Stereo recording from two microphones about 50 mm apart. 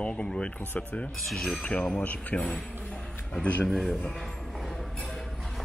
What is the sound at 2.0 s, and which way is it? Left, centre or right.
Speech, left.